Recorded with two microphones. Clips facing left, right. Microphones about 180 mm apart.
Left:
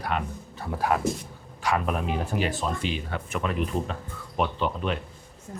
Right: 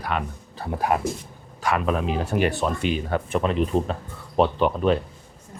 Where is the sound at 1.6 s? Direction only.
80° right; by 3.1 s 55° right (ahead or behind).